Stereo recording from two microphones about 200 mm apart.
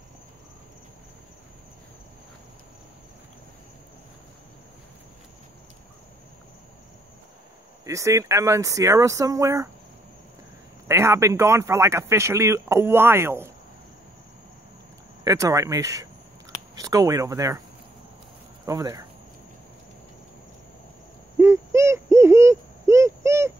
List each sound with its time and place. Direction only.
7.8 s speech: 15° right (ahead or behind)
10.9 s speech: 15° right (ahead or behind)
15.2 s speech: 15° right (ahead or behind)
18.7 s speech: 15° right (ahead or behind)
21.4 s owl: 15° right (ahead or behind)